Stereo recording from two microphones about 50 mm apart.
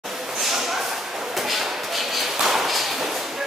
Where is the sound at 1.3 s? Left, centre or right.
Centre.